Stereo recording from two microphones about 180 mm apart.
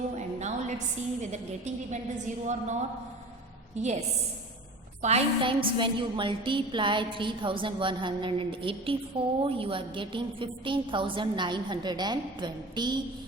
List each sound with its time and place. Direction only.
0.2 s a sound: 40° right (ahead or behind)
1.2 s a woman's voice: 40° right (ahead or behind)
3.8 s a woman's voice: 40° right (ahead or behind)
5.0 s a woman's voice: 30° right (ahead or behind)